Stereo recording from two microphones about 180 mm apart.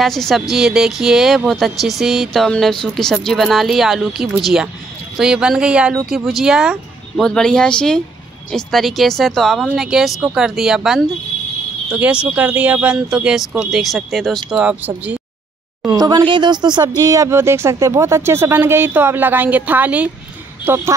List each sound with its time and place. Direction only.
0.0 s speech: centre (ahead or behind)
16.0 s speech: 25° right (ahead or behind)